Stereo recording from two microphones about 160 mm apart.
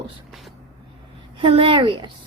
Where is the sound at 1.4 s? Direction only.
35° right (ahead or behind).